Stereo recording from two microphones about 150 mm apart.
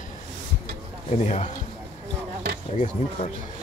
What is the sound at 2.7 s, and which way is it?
Speech, 55° left (ahead or behind).